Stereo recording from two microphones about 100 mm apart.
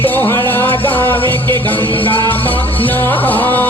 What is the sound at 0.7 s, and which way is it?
Music, 60° left (ahead or behind).